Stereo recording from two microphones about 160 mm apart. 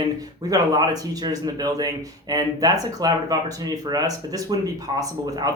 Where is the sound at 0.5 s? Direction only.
25° right (ahead or behind).